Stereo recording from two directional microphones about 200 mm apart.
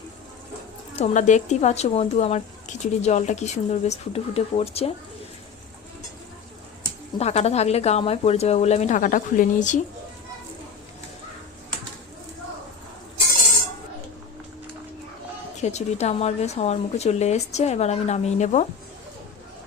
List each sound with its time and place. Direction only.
0.9 s speech: 35° left (ahead or behind)
7.2 s speech: 30° left (ahead or behind)
15.6 s speech: 35° left (ahead or behind)